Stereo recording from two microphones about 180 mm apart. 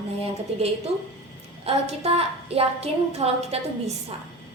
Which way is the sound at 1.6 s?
35° right (ahead or behind).